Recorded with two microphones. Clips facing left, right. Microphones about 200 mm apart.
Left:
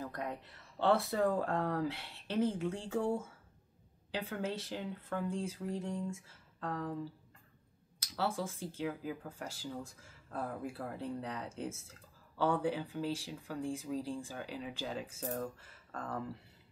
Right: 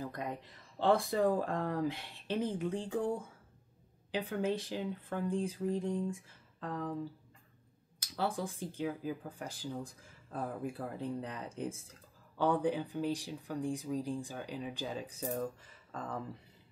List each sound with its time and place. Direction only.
0.0 s speech: 15° right (ahead or behind)
4.1 s speech: 15° right (ahead or behind)
8.2 s speech: 15° right (ahead or behind)